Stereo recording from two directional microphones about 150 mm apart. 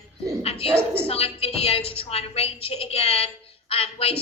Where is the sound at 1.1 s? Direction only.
40° left (ahead or behind).